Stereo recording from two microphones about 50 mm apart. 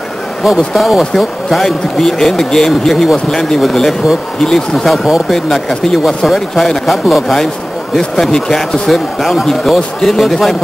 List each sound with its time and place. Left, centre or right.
0.4 s speech: centre
5.3 s speech: centre
8.0 s speech: centre